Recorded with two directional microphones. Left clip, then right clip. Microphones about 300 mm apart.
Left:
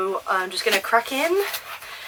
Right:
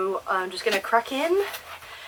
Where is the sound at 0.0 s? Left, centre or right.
Centre.